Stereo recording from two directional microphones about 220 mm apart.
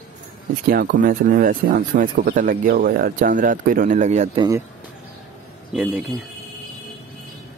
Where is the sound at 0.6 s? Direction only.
40° right (ahead or behind).